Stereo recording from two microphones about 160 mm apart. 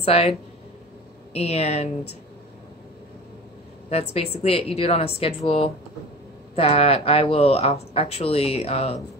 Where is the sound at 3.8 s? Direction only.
40° left (ahead or behind).